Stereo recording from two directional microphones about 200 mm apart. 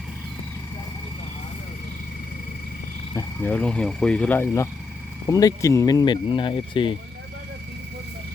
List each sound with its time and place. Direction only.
3.2 s speech: 10° left (ahead or behind); by 6.9 s 25° left (ahead or behind)